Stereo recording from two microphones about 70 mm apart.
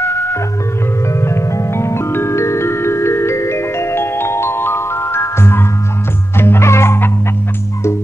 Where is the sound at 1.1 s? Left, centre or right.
Left.